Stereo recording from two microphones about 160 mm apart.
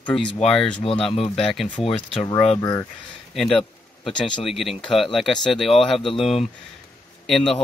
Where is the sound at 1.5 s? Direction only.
Centre (ahead or behind).